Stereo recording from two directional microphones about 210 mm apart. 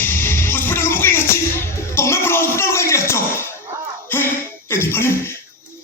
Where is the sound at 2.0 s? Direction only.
10° left (ahead or behind).